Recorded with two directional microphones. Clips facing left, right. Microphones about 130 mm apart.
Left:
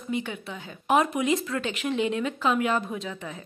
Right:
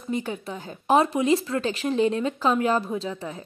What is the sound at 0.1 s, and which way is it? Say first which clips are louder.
Speech: right 2 dB; 40° right (ahead or behind).